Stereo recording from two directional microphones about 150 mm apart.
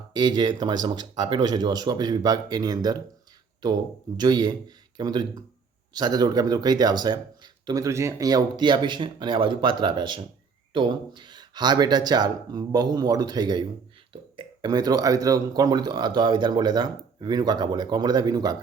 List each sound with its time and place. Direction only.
0.1 s speech: 30° right (ahead or behind)
4.2 s speech: 25° right (ahead or behind)